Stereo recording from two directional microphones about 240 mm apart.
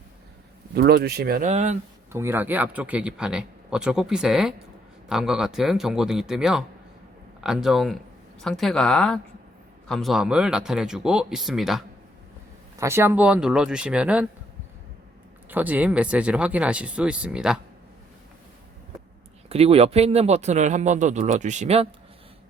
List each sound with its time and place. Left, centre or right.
0.7 s speech: right
2.1 s speech: centre
12.8 s speech: centre
15.4 s speech: centre
19.5 s speech: right